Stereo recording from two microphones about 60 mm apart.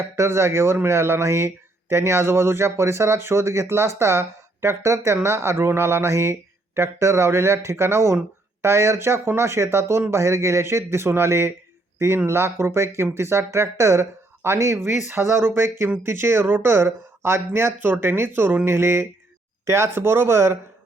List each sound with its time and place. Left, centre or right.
0.0 s speech: right
14.8 s speech: right